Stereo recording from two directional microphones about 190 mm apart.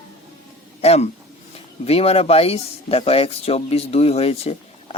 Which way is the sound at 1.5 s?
30° left (ahead or behind).